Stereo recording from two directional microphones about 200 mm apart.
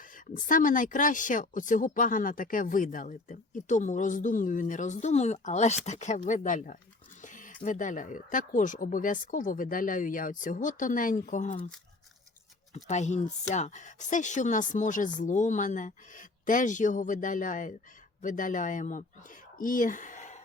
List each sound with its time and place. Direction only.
0.0 s speech: 40° left (ahead or behind)
12.7 s speech: 35° left (ahead or behind)